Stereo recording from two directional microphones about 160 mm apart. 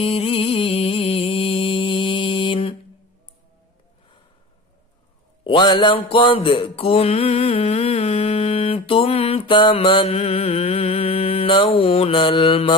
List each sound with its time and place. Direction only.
0.0 s music: 35° left (ahead or behind)
5.4 s mantra: 30° left (ahead or behind)